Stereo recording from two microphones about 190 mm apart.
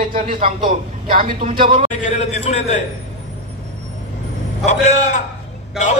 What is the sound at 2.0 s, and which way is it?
Speech, 35° left (ahead or behind).